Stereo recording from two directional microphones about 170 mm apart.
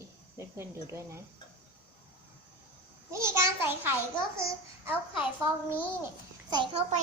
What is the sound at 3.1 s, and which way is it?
A child's voice, 15° right (ahead or behind).